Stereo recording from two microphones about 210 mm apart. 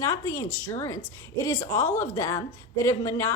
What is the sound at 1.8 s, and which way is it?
A woman's voice, 15° left (ahead or behind).